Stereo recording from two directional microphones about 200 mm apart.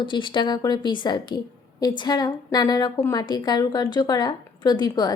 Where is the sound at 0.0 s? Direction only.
25° left (ahead or behind).